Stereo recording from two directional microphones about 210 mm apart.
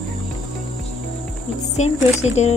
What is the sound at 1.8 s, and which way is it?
Speech, 30° left (ahead or behind).